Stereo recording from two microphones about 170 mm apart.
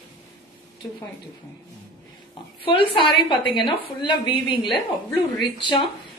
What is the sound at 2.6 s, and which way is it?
A woman's voice, 30° left (ahead or behind).